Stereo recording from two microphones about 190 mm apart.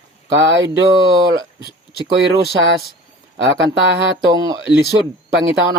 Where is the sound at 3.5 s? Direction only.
70° right (ahead or behind).